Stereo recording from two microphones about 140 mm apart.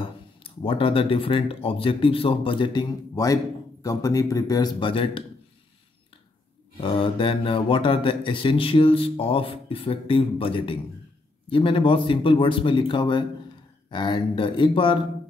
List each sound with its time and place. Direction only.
0.0 s a man's voice: 40° left (ahead or behind)
6.8 s speech: 40° left (ahead or behind)